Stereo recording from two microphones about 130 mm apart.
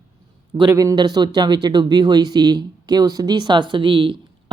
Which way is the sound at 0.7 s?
25° right (ahead or behind).